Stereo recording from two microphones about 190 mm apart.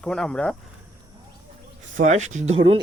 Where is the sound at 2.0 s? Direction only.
40° right (ahead or behind).